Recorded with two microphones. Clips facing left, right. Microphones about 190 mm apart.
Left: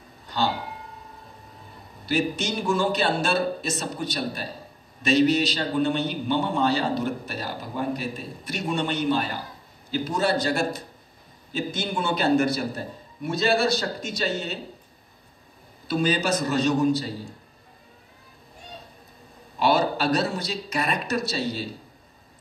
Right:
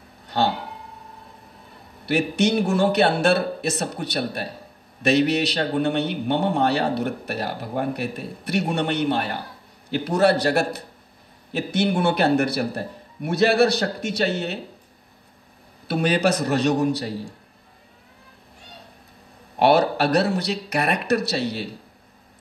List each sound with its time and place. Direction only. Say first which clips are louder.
0.3 s a man's voice: right 4 dB; 60° right (ahead or behind)
2.0 s a man's voice: right 5 dB; 65° right (ahead or behind)
15.9 s a man's voice: right 3 dB; 65° right (ahead or behind)
19.6 s a man's voice: right 4 dB; 65° right (ahead or behind)